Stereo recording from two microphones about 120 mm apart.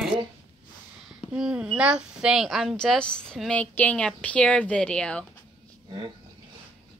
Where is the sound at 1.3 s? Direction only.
5° right (ahead or behind).